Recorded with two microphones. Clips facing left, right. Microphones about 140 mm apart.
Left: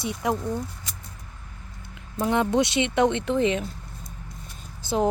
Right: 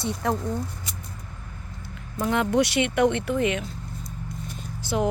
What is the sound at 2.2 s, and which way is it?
Speech, 20° left (ahead or behind).